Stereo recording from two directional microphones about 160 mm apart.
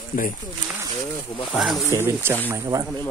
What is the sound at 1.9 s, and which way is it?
Speech, 15° right (ahead or behind).